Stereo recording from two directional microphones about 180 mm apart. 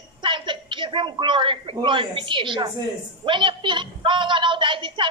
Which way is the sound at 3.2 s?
25° right (ahead or behind).